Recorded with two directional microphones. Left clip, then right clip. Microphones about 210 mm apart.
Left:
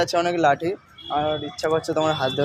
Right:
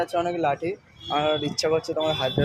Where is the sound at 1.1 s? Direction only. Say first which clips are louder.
Even; 5° right (ahead or behind).